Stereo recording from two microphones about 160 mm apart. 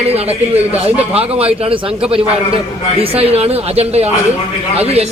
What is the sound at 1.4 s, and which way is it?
Speech, 35° right (ahead or behind).